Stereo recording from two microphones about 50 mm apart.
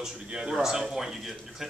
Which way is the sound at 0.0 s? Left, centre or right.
Centre.